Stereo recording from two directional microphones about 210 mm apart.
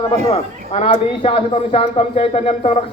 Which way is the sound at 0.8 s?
25° left (ahead or behind).